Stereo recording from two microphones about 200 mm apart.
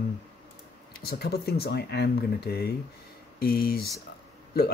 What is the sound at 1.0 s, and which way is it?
Speech, 50° left (ahead or behind).